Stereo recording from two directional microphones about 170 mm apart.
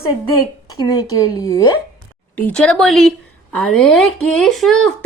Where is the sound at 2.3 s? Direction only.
5° left (ahead or behind).